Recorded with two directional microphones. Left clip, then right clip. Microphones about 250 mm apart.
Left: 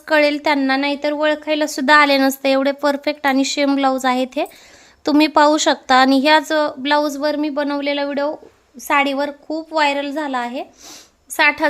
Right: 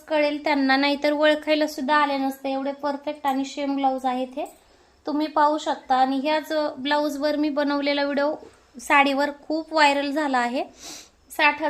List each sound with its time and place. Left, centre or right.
0.0 s a woman's voice: left; by 1.7 s centre
1.7 s a woman's voice: left; by 10.9 s centre
11.3 s a woman's voice: left